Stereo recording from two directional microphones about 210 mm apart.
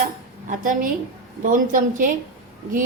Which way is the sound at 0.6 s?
40° right (ahead or behind).